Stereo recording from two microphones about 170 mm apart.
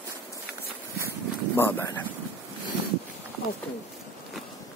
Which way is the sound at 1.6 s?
15° left (ahead or behind).